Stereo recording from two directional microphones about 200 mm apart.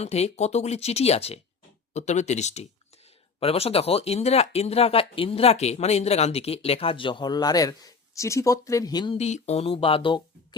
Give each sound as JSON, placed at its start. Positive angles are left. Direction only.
{"t": 0.0, "sound": "speech", "side_deg": 35}
{"t": 9.1, "sound": "speech", "side_deg": 35}